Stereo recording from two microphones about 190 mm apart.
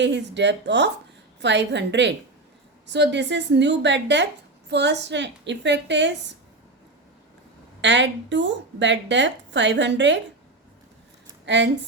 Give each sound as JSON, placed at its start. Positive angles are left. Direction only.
{"t": 0.0, "sound": "a woman's voice", "side_deg": -65}
{"t": 7.8, "sound": "a woman's voice", "side_deg": -70}
{"t": 11.4, "sound": "speech", "side_deg": -70}